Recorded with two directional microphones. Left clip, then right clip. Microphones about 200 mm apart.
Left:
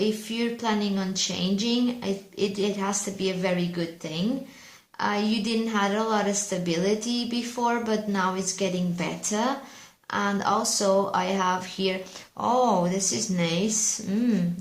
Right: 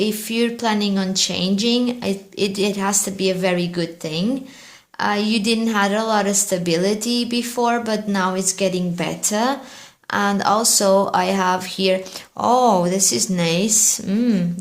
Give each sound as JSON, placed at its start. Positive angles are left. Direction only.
{"t": 0.0, "sound": "a woman's voice", "side_deg": -45}